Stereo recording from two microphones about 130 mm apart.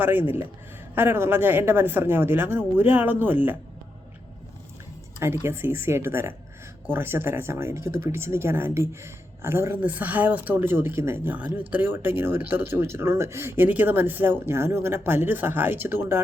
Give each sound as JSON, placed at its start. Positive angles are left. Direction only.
{"t": 0.0, "sound": "speech", "side_deg": -15}
{"t": 5.2, "sound": "speech", "side_deg": -20}